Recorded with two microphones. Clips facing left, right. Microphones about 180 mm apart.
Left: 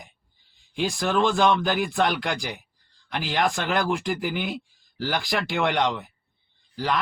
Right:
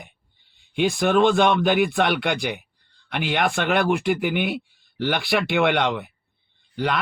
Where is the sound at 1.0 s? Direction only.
60° right (ahead or behind).